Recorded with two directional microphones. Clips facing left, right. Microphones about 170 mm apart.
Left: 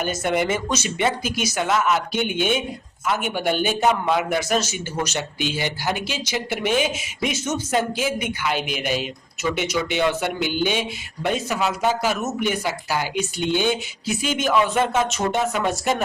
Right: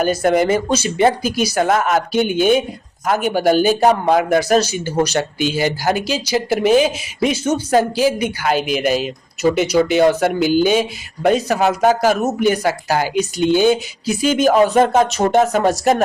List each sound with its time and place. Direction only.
0.0 s a man's voice: 40° right (ahead or behind)
11.5 s a man's voice: 50° right (ahead or behind)